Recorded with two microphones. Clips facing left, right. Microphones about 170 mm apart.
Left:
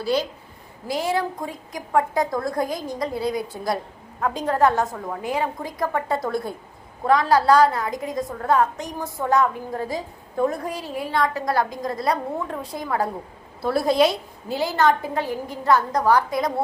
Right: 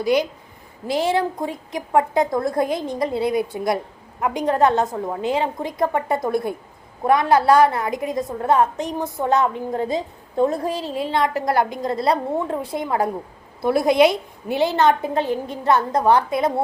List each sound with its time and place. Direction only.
0.0 s speech: 15° right (ahead or behind)
0.9 s a woman's voice: 25° right (ahead or behind)